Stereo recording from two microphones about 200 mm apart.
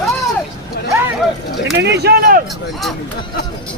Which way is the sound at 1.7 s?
55° right (ahead or behind).